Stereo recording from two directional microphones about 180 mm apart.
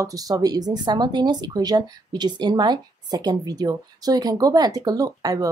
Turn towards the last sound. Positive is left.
turn(degrees=-20)  # may be behind; listen again after turning